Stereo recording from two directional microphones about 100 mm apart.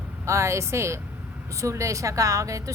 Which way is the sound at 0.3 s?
30° right (ahead or behind).